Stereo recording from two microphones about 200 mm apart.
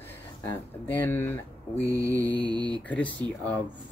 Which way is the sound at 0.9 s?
10° left (ahead or behind).